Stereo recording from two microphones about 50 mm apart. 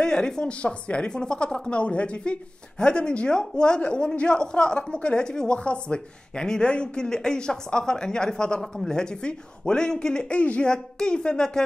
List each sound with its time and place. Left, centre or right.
0.0 s a woman's voice: centre